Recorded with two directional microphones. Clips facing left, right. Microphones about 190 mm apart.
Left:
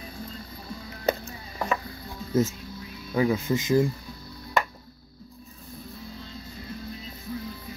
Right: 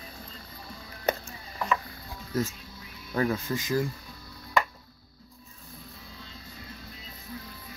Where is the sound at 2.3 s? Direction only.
20° left (ahead or behind).